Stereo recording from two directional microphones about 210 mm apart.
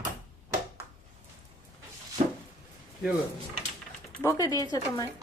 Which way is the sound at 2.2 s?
30° right (ahead or behind).